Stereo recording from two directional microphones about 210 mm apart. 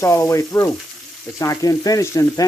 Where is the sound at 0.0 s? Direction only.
15° left (ahead or behind).